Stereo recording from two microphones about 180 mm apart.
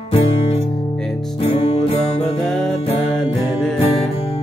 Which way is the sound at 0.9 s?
Centre (ahead or behind).